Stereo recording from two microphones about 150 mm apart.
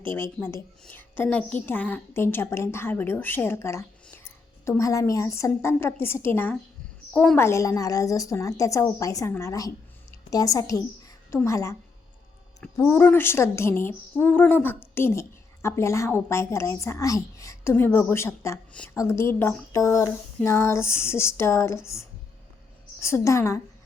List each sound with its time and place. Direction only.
0.0 s a woman's voice: 15° left (ahead or behind)
7.3 s a woman's voice: 20° left (ahead or behind)
9.3 s a sound: 20° left (ahead or behind)
11.3 s a woman's voice: 20° left (ahead or behind)